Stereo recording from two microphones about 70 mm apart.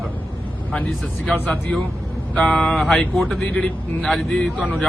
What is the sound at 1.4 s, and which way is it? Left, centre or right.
A man's voice, centre.